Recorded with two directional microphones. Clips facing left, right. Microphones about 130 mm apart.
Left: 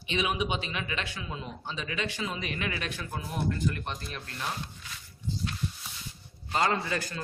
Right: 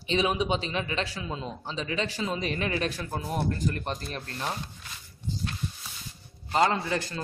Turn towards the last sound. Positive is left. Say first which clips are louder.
# right 2 dB
turn(degrees=-25)  # may be behind; listen again after turning